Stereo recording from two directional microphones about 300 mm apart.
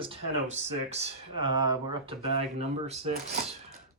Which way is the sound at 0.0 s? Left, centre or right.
Centre.